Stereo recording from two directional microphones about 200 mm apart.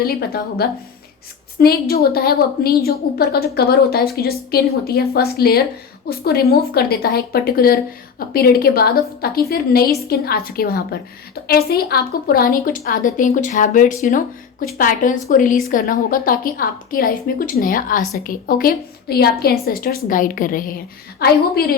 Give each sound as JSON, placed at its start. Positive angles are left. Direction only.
{"t": 0.0, "sound": "a woman's voice", "side_deg": 50}